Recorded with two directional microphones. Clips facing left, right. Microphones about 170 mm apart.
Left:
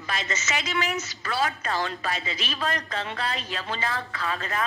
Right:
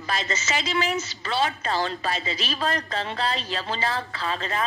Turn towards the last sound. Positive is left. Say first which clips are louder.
# right 1 dB
turn(degrees=-25)  # may be behind; listen again after turning